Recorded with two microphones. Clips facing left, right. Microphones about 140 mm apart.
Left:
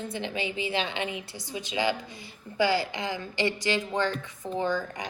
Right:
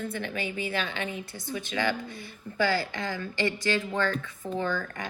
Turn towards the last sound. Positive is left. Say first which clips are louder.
# left 2 dB
turn(degrees=15)  # may be behind; listen again after turning